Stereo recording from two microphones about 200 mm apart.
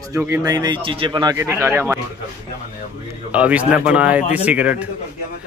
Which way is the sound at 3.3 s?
5° right (ahead or behind).